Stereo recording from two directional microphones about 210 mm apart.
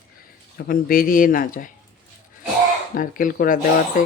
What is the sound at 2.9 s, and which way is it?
Speech, 40° left (ahead or behind).